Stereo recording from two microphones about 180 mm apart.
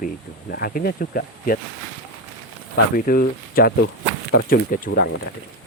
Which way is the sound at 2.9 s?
55° left (ahead or behind).